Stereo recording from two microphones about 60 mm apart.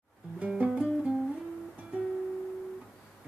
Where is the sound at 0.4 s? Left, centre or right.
Right.